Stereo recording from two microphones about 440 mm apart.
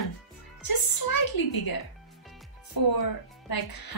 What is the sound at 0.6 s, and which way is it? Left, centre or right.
Speech, left.